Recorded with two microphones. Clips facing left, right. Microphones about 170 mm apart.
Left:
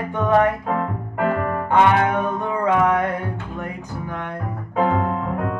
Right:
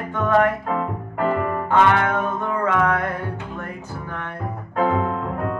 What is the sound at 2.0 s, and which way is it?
Music, 15° left (ahead or behind).